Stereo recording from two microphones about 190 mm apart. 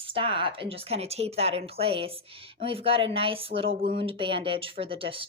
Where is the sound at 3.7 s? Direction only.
50° right (ahead or behind).